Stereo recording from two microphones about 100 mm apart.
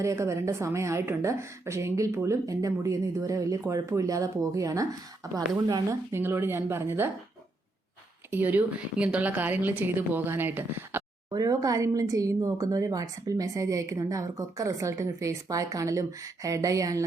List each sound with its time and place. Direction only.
0.0 s a woman's voice: 30° right (ahead or behind)
6.1 s a woman's voice: 25° right (ahead or behind)
8.3 s a woman's voice: 20° right (ahead or behind)
11.3 s speech: 40° right (ahead or behind)